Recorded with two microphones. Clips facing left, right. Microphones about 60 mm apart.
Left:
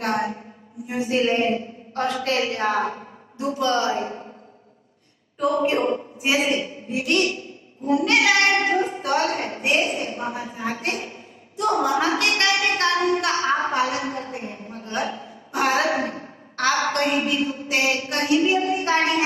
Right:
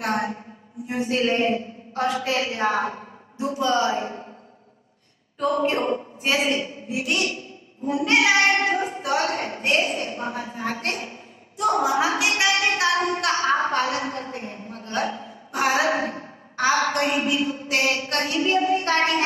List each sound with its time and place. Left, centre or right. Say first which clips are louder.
0.0 s a man's voice: left 1 dB; centre
3.3 s child singing: even; centre
3.9 s a woman's voice: left 1 dB; centre
5.4 s a woman's voice: left 1 dB; centre
7.8 s child singing: left 1 dB; centre
8.6 s a woman's voice: left 2 dB; centre
13.8 s a woman's voice: even; centre
14.7 s a sound: left 1 dB; centre
15.0 s a woman's voice: right 1 dB; centre